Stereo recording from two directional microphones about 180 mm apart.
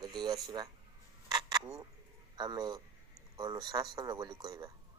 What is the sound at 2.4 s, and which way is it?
A man's voice, 25° right (ahead or behind).